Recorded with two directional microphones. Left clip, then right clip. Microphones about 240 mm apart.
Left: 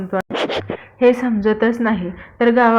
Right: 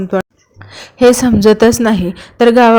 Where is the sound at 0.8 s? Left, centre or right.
Right.